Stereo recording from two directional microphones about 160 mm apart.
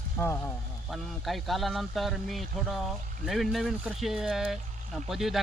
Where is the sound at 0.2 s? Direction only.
15° left (ahead or behind).